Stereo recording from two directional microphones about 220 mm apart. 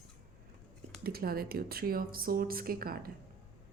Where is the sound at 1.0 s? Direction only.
45° right (ahead or behind).